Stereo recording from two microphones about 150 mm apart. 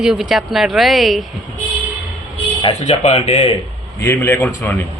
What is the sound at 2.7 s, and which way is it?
Speech, 50° left (ahead or behind).